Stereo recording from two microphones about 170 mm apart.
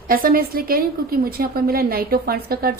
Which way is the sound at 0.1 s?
55° right (ahead or behind).